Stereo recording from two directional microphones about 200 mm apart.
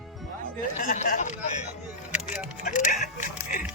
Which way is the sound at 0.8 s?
45° left (ahead or behind).